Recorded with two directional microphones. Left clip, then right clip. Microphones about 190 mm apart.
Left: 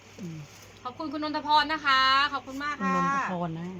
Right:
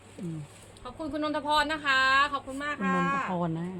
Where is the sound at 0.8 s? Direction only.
5° right (ahead or behind).